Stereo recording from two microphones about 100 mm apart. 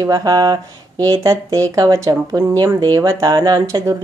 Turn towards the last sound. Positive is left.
turn(degrees=-40)  # may be behind; listen again after turning